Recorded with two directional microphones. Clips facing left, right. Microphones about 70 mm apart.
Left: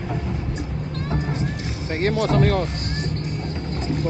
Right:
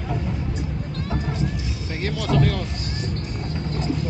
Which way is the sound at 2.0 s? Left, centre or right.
Left.